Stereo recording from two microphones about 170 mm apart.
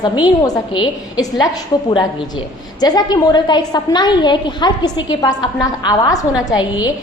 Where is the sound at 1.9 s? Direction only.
25° left (ahead or behind).